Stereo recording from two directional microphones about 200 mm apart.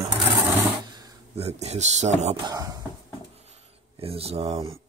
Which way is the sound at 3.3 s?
30° right (ahead or behind).